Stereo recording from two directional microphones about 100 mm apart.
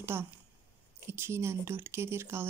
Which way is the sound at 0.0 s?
25° right (ahead or behind).